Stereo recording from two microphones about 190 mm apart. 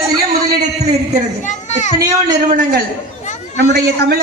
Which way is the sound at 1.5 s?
40° left (ahead or behind).